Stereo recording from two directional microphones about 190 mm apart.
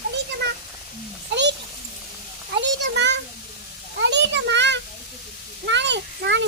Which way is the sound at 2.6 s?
65° right (ahead or behind).